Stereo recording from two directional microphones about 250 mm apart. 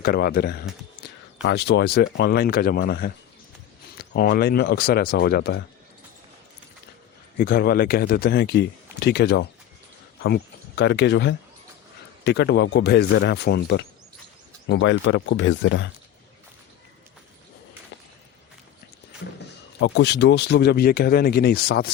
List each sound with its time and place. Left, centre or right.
0.0 s speech: left
7.3 s a man's voice: left
19.8 s speech: left